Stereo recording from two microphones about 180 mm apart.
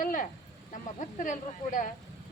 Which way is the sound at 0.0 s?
50° left (ahead or behind).